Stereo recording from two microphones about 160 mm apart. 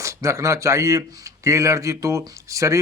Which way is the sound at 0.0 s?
20° right (ahead or behind).